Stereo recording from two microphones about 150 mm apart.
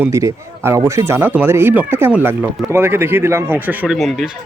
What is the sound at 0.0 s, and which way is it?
A man's voice, 20° right (ahead or behind).